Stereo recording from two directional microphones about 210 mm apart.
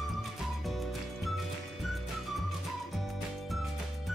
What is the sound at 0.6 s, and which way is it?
Music, centre (ahead or behind).